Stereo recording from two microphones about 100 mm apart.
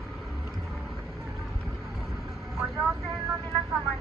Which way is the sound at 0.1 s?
Centre (ahead or behind).